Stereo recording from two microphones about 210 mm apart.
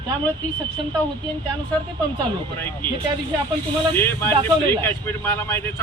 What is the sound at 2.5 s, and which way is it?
Speech, 10° left (ahead or behind).